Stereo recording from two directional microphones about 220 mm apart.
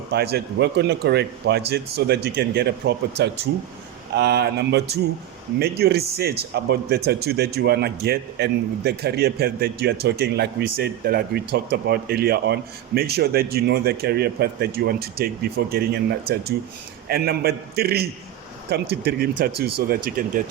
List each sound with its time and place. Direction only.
0.1 s speech: 45° right (ahead or behind)